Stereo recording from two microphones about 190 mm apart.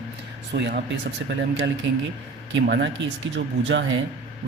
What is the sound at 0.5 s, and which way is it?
Speech, 60° right (ahead or behind).